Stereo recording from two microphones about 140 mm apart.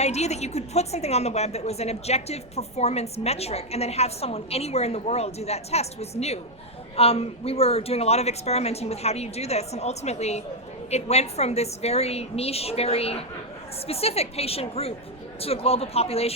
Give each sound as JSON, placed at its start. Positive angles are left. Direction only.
{"t": 0.0, "sound": "a woman's voice", "side_deg": 50}